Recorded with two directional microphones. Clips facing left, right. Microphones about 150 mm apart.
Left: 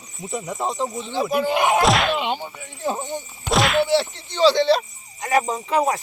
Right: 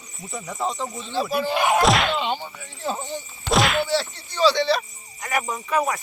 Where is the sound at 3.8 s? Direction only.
20° left (ahead or behind).